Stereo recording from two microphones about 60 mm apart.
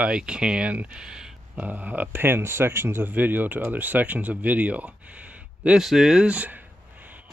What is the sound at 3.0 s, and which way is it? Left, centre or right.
Speech, right.